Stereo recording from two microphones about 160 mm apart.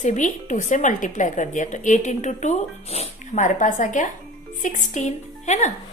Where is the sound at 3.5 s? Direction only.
55° left (ahead or behind).